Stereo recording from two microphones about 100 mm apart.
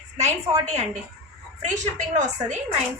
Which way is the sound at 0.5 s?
90° right.